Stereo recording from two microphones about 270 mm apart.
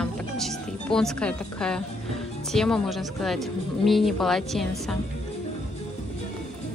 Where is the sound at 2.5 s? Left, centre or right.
Centre.